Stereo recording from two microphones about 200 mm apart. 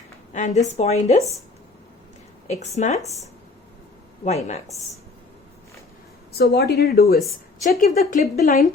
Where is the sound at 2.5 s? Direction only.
35° left (ahead or behind).